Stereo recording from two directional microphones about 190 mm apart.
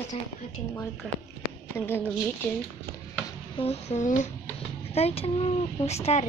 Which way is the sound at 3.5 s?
35° left (ahead or behind).